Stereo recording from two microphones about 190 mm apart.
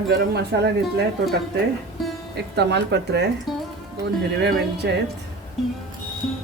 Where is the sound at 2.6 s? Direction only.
65° right (ahead or behind).